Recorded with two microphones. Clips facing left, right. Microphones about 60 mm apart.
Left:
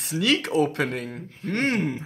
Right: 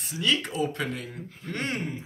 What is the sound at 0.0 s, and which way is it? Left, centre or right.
Speech, left.